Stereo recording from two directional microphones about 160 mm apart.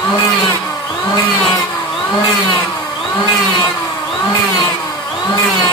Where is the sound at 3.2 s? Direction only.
25° left (ahead or behind).